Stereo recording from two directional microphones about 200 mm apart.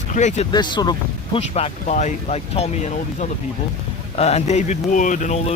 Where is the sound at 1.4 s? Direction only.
35° left (ahead or behind).